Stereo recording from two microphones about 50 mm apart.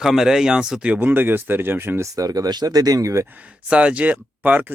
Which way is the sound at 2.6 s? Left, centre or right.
Right.